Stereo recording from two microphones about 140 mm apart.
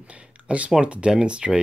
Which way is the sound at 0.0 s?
10° right (ahead or behind).